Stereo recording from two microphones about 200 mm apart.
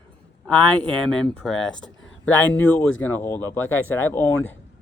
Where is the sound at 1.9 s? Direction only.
70° left (ahead or behind).